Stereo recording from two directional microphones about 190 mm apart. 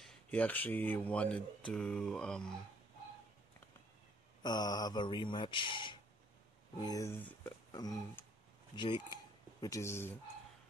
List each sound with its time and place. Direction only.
0.0 s speech: 5° left (ahead or behind)
4.4 s speech: 20° left (ahead or behind)